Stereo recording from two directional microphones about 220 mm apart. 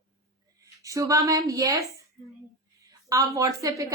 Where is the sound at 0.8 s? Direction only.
15° right (ahead or behind).